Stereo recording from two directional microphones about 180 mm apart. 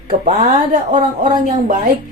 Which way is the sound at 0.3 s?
40° right (ahead or behind).